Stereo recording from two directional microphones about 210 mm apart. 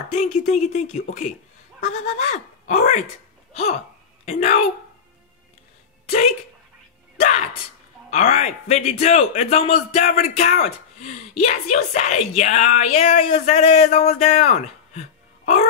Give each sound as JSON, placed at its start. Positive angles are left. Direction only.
{"t": 0.1, "sound": "a man's voice", "side_deg": 35}
{"t": 4.3, "sound": "a man's voice", "side_deg": 30}
{"t": 6.0, "sound": "speech", "side_deg": 30}
{"t": 8.1, "sound": "a man's voice", "side_deg": 30}